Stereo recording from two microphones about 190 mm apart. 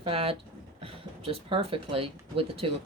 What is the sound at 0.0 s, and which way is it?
Speech, 30° right (ahead or behind).